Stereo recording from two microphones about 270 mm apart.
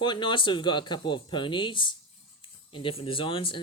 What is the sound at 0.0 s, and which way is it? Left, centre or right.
Speech, centre.